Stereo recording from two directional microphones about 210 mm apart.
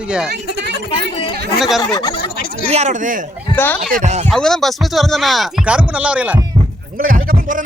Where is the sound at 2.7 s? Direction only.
35° right (ahead or behind).